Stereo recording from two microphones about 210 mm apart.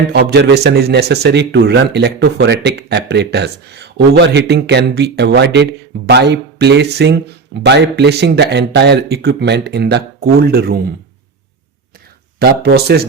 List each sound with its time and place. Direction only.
0.1 s a man's voice: 50° right (ahead or behind)
12.4 s a man's voice: 50° right (ahead or behind)